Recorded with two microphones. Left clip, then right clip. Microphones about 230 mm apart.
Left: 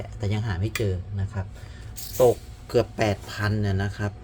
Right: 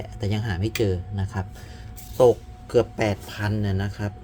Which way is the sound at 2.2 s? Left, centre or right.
Centre.